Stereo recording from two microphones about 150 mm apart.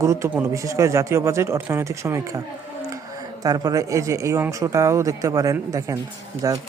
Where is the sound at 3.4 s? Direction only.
25° right (ahead or behind).